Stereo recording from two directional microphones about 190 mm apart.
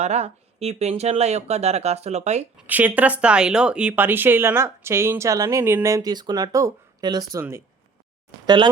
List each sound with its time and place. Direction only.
0.0 s speech: 35° right (ahead or behind)
2.6 s speech: 10° right (ahead or behind)
8.4 s speech: 25° right (ahead or behind)